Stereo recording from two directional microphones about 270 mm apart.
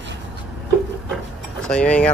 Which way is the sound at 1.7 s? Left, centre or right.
Centre.